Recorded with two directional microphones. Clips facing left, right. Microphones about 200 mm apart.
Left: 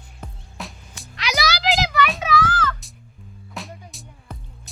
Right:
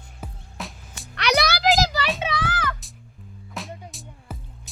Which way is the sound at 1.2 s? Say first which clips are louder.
Right 3 dB; 60° right (ahead or behind).